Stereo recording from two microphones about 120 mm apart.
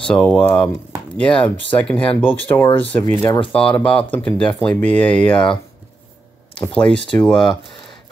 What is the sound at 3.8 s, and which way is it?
Speech, 45° left (ahead or behind).